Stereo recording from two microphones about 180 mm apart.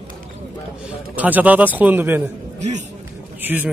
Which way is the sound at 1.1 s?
10° right (ahead or behind).